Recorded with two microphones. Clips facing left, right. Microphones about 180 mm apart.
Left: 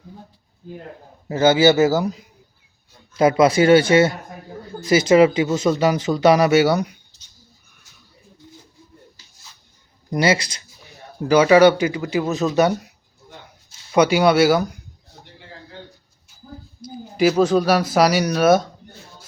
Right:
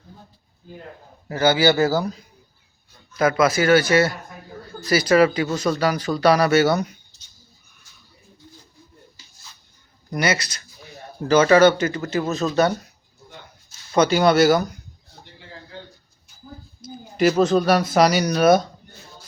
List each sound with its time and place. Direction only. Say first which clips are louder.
1.3 s speech: left 3 dB; 25° left (ahead or behind)
3.2 s speech: left 4 dB; 30° left (ahead or behind); by 6.9 s 15° left (ahead or behind)
10.1 s speech: left 4 dB; 25° left (ahead or behind)
11.2 s speech: left 2 dB; 10° left (ahead or behind)
17.2 s speech: left 1 dB; 10° left (ahead or behind)